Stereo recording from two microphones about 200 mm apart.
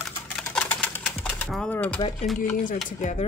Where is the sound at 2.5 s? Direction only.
40° left (ahead or behind).